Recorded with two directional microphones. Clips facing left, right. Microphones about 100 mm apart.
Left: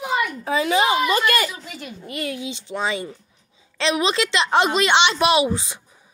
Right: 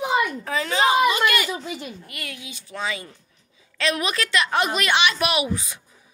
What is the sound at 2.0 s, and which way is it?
A woman's voice, 25° left (ahead or behind).